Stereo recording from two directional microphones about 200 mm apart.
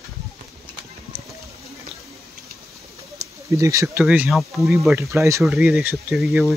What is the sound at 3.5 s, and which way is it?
Speech, 15° right (ahead or behind).